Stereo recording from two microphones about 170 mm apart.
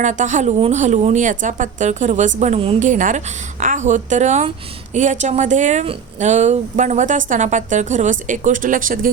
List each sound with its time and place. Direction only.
0.0 s a woman's voice: 45° right (ahead or behind)
2.9 s a woman's voice: 50° right (ahead or behind)